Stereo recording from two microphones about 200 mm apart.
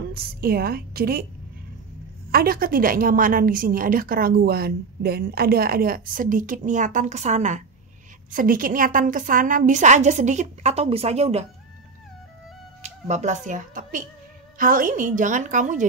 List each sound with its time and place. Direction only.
0.1 s a woman's voice: 50° right (ahead or behind)
2.3 s a woman's voice: 45° right (ahead or behind); by 11.4 s 30° right (ahead or behind)
12.8 s a woman's voice: 35° right (ahead or behind)